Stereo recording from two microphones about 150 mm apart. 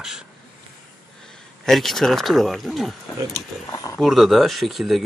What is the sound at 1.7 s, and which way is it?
Speech, centre (ahead or behind).